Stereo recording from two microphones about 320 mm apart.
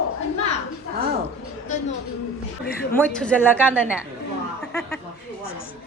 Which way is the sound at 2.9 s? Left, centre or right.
Centre.